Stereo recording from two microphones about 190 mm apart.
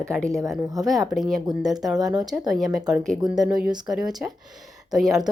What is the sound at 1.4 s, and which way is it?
Speech, 20° right (ahead or behind).